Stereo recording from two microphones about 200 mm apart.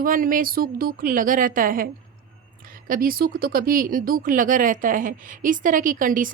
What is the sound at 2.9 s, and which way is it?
A woman's voice, 45° right (ahead or behind).